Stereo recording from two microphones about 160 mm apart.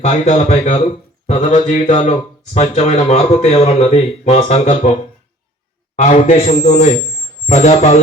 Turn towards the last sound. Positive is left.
turn(degrees=45)  # may be behind; listen again after turning